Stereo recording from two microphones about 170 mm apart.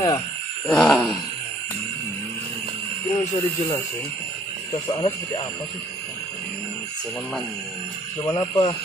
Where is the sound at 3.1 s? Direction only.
20° left (ahead or behind).